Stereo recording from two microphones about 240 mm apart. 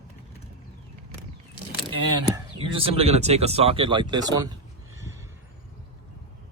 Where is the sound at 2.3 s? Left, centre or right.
Right.